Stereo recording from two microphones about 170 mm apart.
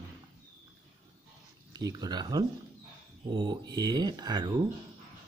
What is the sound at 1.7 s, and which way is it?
Speech, 20° right (ahead or behind).